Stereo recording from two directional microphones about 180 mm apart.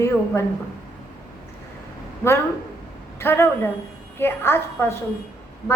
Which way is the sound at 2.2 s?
15° left (ahead or behind).